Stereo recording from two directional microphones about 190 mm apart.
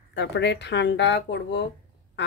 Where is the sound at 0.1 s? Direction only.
65° left (ahead or behind).